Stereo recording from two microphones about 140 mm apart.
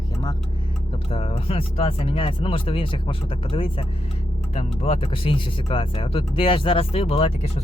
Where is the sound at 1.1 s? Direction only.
45° left (ahead or behind).